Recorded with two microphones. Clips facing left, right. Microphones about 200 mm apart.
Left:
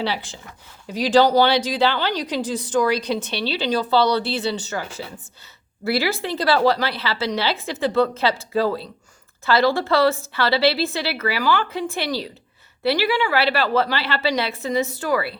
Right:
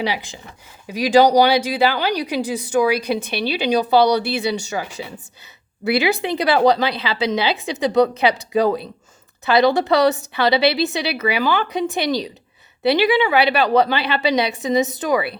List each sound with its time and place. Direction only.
0.0 s a woman's voice: 15° right (ahead or behind)